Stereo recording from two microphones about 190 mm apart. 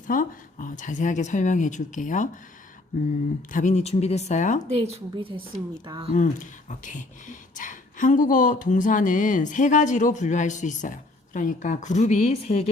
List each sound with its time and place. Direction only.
0.1 s speech: 45° left (ahead or behind)
3.5 s speech: 40° left (ahead or behind)
4.7 s a woman's voice: 35° right (ahead or behind)
6.1 s speech: 40° left (ahead or behind)